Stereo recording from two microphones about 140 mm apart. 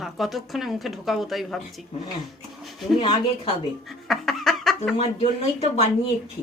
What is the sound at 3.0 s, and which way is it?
Speech, 40° left (ahead or behind).